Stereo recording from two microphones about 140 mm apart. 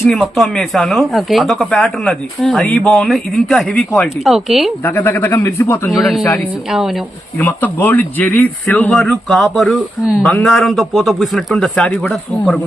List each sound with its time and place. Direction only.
0.0 s a man's voice: centre (ahead or behind)
4.8 s speech: 15° left (ahead or behind)
5.9 s a man's voice: centre (ahead or behind)
7.3 s a man's voice: 15° left (ahead or behind)